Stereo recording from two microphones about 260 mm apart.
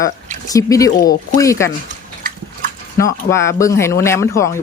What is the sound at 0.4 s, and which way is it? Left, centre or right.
Speech, centre.